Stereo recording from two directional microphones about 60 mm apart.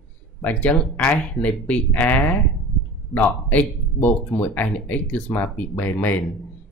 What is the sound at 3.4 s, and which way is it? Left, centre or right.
Speech, left.